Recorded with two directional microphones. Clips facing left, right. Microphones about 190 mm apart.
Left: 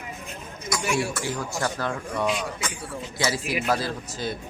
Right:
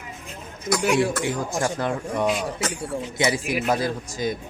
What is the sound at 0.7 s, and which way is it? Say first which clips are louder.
Speech: right 6 dB; 60° right (ahead or behind).